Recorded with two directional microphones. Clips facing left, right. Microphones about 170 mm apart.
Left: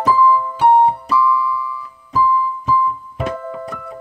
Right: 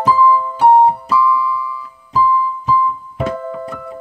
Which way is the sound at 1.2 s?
10° right (ahead or behind).